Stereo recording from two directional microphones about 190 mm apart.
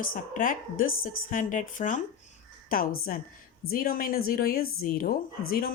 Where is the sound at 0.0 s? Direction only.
45° left (ahead or behind).